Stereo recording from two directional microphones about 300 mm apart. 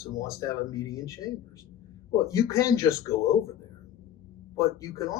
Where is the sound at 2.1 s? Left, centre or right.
Centre.